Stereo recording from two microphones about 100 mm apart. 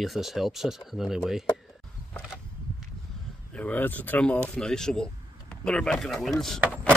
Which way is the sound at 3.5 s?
15° left (ahead or behind).